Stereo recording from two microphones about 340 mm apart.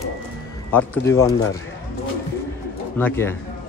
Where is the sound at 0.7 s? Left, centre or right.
Centre.